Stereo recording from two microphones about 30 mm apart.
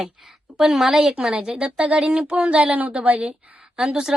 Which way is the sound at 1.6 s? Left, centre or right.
Right.